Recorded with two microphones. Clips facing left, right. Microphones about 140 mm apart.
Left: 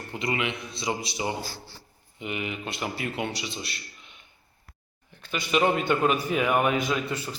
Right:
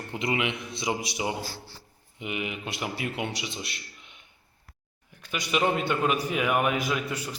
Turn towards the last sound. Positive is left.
turn(degrees=-5)  # may be behind; listen again after turning